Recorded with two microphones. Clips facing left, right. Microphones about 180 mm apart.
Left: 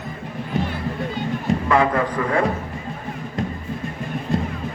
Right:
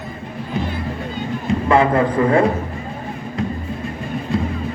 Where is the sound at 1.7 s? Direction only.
25° right (ahead or behind).